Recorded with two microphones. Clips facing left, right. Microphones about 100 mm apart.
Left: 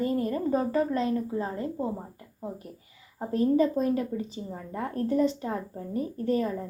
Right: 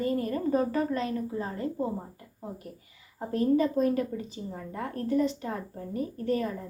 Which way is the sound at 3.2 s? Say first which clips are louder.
Left 2 dB; 25° left (ahead or behind).